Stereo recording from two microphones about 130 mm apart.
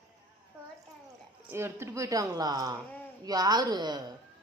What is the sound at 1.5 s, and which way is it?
A woman's voice, 20° right (ahead or behind).